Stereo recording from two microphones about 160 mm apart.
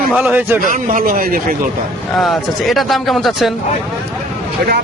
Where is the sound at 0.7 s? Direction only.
60° right (ahead or behind).